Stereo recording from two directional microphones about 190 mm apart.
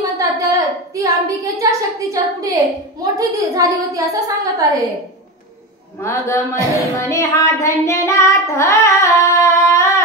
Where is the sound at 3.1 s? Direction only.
20° right (ahead or behind).